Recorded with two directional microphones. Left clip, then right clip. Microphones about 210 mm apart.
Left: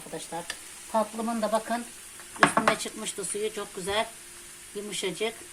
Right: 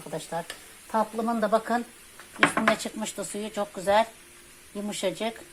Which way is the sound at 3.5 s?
30° right (ahead or behind).